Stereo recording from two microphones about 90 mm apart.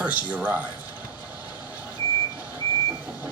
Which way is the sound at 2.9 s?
15° right (ahead or behind).